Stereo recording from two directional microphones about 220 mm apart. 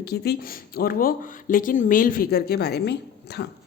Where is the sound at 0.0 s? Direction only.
45° left (ahead or behind).